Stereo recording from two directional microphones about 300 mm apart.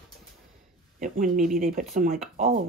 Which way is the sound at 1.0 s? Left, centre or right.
Right.